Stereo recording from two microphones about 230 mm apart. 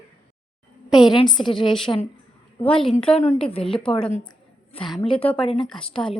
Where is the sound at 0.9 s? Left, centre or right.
Centre.